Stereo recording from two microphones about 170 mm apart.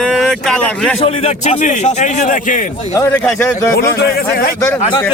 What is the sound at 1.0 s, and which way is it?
A man's voice, 35° left (ahead or behind).